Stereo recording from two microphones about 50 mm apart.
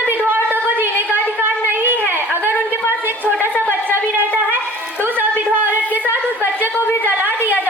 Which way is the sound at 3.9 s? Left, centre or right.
Right.